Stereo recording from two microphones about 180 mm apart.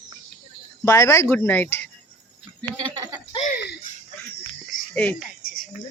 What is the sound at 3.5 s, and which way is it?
Speech, 65° left (ahead or behind).